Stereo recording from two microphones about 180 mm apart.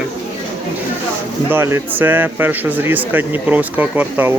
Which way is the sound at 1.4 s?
15° right (ahead or behind).